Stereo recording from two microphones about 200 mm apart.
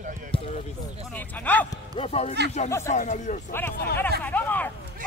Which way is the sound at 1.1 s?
10° left (ahead or behind).